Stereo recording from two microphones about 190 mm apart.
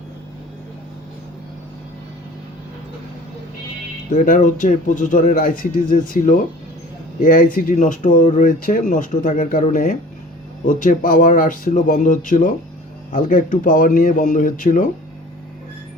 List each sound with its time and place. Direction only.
4.1 s speech: 40° left (ahead or behind)